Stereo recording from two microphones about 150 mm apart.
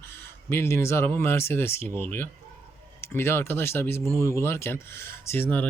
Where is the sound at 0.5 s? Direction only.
15° left (ahead or behind).